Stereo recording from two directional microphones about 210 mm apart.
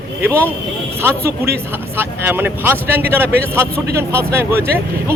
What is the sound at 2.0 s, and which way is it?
Speech, 10° right (ahead or behind).